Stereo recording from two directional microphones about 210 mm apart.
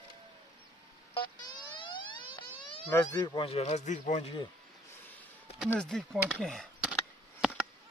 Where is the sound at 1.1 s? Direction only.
20° left (ahead or behind).